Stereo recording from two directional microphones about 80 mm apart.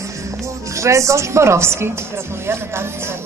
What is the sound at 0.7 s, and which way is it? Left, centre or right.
A woman's voice, right.